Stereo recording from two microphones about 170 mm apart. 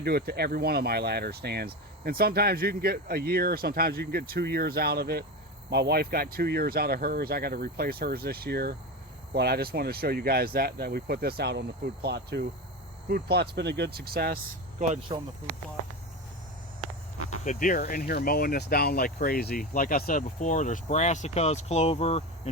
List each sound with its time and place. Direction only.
0.0 s speech: 70° right (ahead or behind)
15.1 s speech: 25° right (ahead or behind)
17.4 s speech: 50° left (ahead or behind)